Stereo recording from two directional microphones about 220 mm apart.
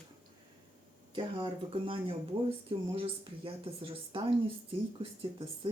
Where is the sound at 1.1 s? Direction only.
25° right (ahead or behind).